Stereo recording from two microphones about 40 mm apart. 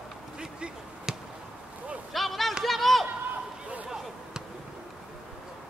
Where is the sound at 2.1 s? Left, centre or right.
Centre.